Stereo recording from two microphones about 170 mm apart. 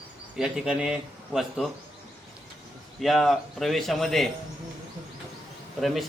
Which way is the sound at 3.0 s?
Centre (ahead or behind).